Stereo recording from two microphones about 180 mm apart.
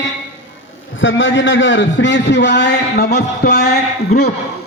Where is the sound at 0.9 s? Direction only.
90° left; by 4.3 s 60° left (ahead or behind).